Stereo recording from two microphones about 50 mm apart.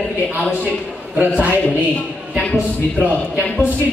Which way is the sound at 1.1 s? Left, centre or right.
Right.